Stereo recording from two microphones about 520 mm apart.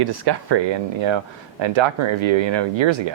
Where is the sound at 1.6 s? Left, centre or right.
Right.